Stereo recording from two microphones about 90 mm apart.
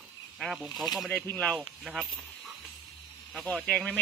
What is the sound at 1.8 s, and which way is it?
Speech, centre (ahead or behind).